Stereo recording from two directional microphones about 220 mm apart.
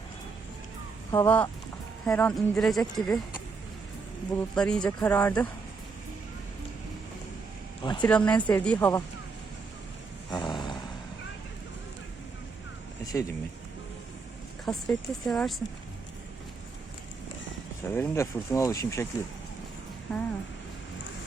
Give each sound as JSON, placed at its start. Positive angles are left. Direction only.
{"t": 1.1, "sound": "speech", "side_deg": 10}
{"t": 4.4, "sound": "speech", "side_deg": 5}
{"t": 7.8, "sound": "speech", "side_deg": 20}
{"t": 8.1, "sound": "speech", "side_deg": 5}
{"t": 10.2, "sound": "a sound", "side_deg": 20}
{"t": 14.6, "sound": "speech", "side_deg": 0}
{"t": 17.8, "sound": "speech", "side_deg": 10}
{"t": 20.1, "sound": "speech", "side_deg": 10}